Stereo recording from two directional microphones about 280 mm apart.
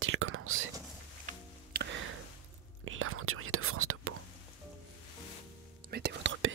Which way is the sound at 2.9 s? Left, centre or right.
Right.